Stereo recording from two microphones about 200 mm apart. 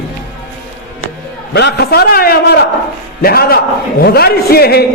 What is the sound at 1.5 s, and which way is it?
A man's voice, 55° left (ahead or behind).